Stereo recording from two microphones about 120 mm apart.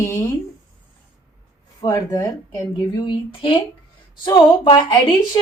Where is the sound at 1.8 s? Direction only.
25° left (ahead or behind).